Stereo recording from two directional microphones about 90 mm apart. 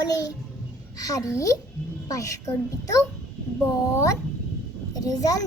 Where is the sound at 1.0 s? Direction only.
40° left (ahead or behind).